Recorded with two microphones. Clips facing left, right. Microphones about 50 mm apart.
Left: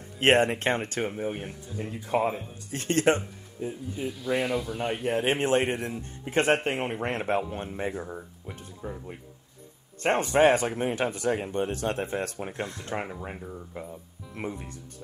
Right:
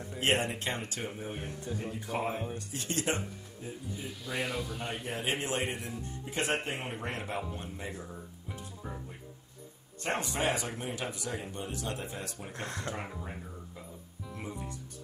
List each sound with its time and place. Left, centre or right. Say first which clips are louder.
0.2 s speech: left 8 dB; left
4.4 s a man's voice: left 3 dB; centre
4.7 s a man's voice: left 8 dB; centre
5.0 s speech: left 9 dB; left
10.0 s speech: left 11 dB; left
14.3 s speech: left 6 dB; left